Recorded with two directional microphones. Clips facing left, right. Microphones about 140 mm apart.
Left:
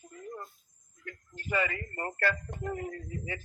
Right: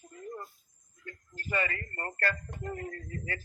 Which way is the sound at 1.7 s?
20° left (ahead or behind).